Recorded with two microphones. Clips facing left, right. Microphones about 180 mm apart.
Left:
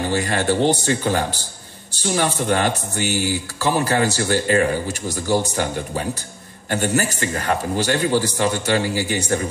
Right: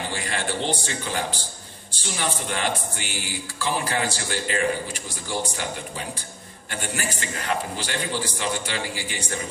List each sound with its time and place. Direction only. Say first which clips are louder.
0.1 s speech: left 9 dB; 45° left (ahead or behind)